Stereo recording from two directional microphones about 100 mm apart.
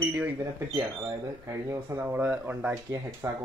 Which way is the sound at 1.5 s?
30° right (ahead or behind).